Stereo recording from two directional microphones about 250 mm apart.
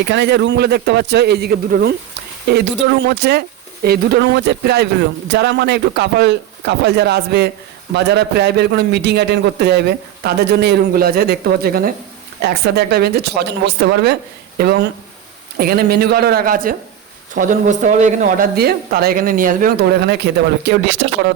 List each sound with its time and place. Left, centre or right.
0.0 s speech: right